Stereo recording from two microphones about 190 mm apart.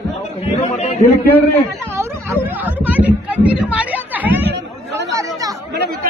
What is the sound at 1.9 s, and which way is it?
Chatter, 15° right (ahead or behind).